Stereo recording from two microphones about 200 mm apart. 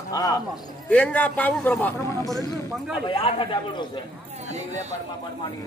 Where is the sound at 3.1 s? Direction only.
25° left (ahead or behind).